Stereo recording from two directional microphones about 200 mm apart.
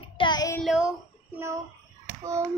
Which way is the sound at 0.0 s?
25° left (ahead or behind).